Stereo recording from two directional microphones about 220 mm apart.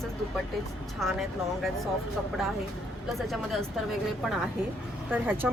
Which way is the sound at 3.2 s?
Centre (ahead or behind).